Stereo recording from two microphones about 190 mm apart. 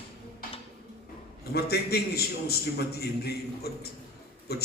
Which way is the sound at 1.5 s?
55° left (ahead or behind).